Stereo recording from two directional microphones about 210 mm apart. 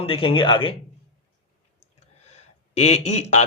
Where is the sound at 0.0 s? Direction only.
25° left (ahead or behind).